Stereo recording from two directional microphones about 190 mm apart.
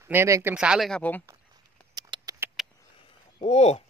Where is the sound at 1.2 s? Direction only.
20° right (ahead or behind).